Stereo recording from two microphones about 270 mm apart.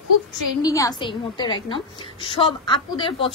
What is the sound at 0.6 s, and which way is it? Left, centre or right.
A woman's voice, centre.